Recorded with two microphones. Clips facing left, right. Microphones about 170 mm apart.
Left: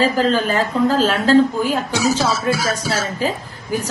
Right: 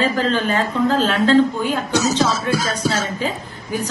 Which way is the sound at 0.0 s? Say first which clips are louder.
Left 2 dB; 35° left (ahead or behind).